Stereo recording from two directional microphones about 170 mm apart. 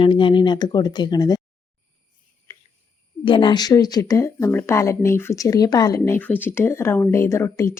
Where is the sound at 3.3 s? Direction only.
30° left (ahead or behind).